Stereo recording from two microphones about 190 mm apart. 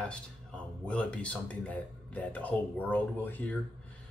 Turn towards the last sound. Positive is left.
turn(degrees=10)  # may be behind; listen again after turning